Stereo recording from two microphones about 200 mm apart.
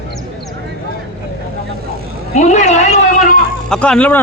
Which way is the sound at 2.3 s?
35° left (ahead or behind).